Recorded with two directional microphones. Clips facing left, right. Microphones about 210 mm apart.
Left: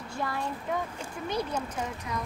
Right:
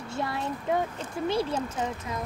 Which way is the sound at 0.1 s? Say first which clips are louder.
Right 2 dB; 25° right (ahead or behind).